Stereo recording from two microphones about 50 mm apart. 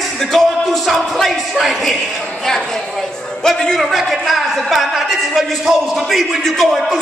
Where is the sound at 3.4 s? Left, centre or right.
Centre.